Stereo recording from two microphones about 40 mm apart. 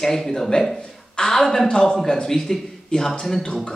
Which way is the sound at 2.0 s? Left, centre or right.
Centre.